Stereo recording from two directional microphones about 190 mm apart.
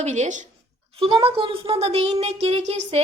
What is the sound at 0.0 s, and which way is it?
Speech, 35° right (ahead or behind).